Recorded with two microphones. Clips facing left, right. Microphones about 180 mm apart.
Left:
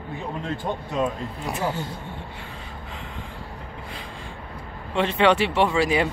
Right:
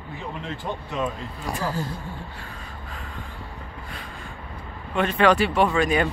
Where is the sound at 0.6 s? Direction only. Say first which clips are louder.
Left 2 dB; 25° left (ahead or behind).